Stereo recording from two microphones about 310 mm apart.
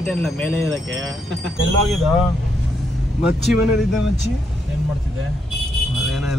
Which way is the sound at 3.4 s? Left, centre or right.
Centre.